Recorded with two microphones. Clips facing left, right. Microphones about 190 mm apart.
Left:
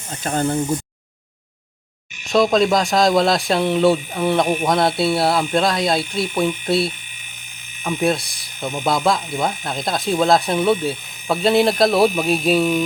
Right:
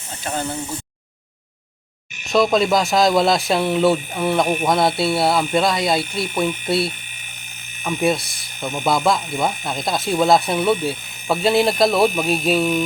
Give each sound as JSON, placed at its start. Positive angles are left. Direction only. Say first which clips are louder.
{"t": 0.2, "sound": "speech", "louder": "left 3 dB", "side_deg": 50}
{"t": 2.2, "sound": "speech", "louder": "left 1 dB", "side_deg": 0}